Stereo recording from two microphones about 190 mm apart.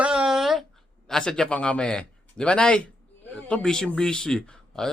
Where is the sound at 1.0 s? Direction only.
5° left (ahead or behind).